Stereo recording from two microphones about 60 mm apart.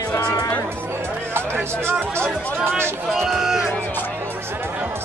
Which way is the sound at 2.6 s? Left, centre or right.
Right.